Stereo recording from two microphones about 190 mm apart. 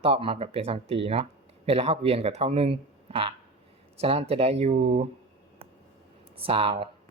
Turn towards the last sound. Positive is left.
turn(degrees=-30)  # may be behind; listen again after turning